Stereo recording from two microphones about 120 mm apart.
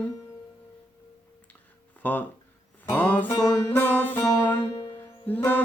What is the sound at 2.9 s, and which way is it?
Music, 15° left (ahead or behind).